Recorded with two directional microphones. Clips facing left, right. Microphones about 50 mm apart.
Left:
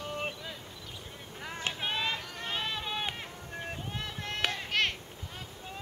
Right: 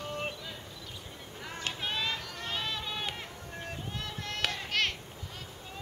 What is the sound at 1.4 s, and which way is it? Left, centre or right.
Run, centre.